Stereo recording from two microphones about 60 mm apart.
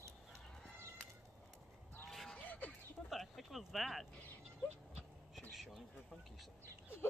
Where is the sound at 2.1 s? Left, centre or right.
Centre.